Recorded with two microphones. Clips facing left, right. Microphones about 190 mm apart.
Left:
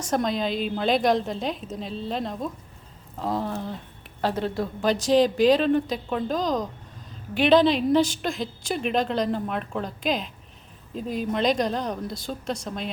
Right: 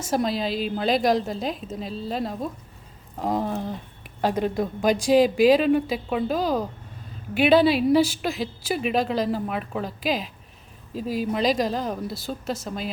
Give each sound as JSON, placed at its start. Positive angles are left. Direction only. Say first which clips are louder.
{"t": 0.0, "sound": "a woman's voice", "louder": "even", "side_deg": -5}
{"t": 3.2, "sound": "a woman's voice", "louder": "right 2 dB", "side_deg": -15}